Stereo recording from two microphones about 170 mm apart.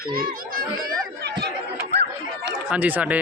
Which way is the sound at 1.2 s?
75° right (ahead or behind).